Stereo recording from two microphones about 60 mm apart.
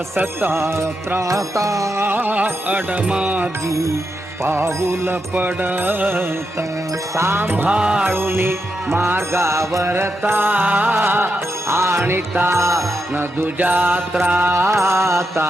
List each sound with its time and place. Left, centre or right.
0.2 s music: right
1.3 s music: right
2.0 s music: right; by 3.4 s centre
3.7 s music: right
4.4 s music: right
5.3 s music: right
7.7 s music: centre
8.1 s music: right
9.9 s music: right
11.7 s music: right
12.5 s music: right
13.1 s music: right
14.5 s music: right